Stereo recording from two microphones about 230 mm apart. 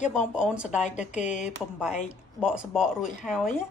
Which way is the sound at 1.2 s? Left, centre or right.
Left.